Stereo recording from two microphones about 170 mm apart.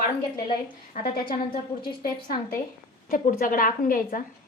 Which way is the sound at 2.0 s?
55° left (ahead or behind).